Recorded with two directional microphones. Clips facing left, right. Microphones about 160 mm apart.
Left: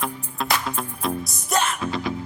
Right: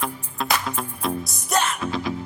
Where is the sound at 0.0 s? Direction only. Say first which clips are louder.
Even; centre (ahead or behind).